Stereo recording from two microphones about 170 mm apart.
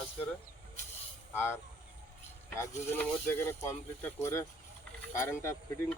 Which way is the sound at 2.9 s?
15° left (ahead or behind).